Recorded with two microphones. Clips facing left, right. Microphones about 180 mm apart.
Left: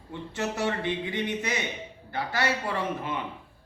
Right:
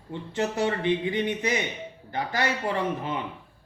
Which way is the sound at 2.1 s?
15° right (ahead or behind).